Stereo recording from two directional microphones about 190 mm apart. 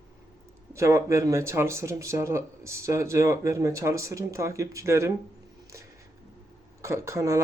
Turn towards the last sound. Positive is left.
turn(degrees=-15)  # may be behind; listen again after turning